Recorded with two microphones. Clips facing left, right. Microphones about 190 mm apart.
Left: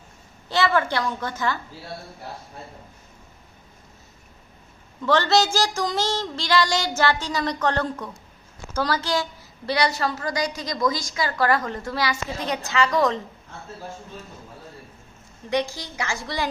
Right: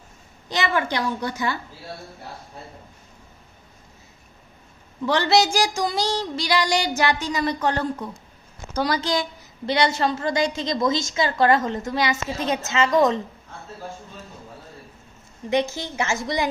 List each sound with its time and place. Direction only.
0.4 s speech: 15° right (ahead or behind)
5.0 s a woman's voice: 15° right (ahead or behind)
15.4 s a woman's voice: 20° right (ahead or behind)